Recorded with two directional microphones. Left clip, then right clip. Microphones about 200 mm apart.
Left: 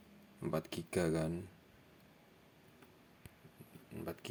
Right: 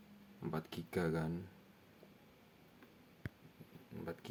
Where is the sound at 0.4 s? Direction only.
15° left (ahead or behind).